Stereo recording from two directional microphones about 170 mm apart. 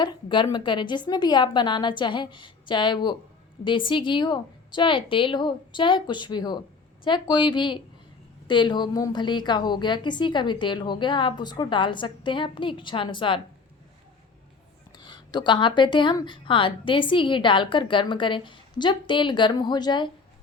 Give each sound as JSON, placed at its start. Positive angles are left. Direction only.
{"t": 0.0, "sound": "a woman's voice", "side_deg": 25}
{"t": 14.9, "sound": "a woman's voice", "side_deg": 25}